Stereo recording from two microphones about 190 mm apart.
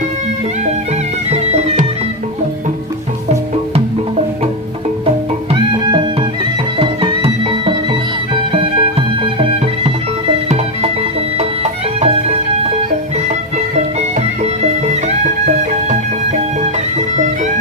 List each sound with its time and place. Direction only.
1.3 s music: 35° right (ahead or behind)
6.7 s music: 25° right (ahead or behind)
13.7 s music: 35° right (ahead or behind)